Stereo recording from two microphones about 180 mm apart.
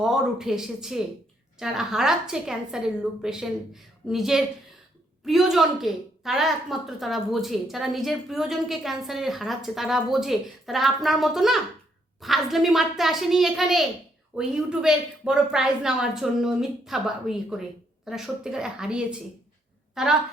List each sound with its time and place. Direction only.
0.0 s a woman's voice: 5° right (ahead or behind)